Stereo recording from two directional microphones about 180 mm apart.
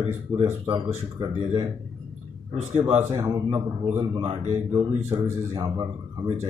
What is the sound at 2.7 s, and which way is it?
Speech, 30° right (ahead or behind).